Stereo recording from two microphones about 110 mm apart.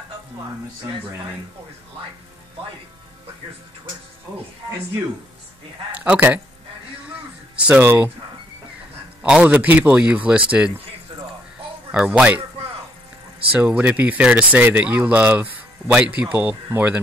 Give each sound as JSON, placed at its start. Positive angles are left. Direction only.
{"t": 5.9, "sound": "speech", "side_deg": -10}
{"t": 7.1, "sound": "a sound", "side_deg": -10}
{"t": 9.2, "sound": "speech", "side_deg": -10}
{"t": 11.9, "sound": "speech", "side_deg": -10}
{"t": 13.5, "sound": "speech", "side_deg": -15}